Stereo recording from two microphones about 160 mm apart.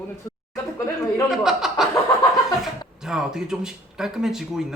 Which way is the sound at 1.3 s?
Centre (ahead or behind).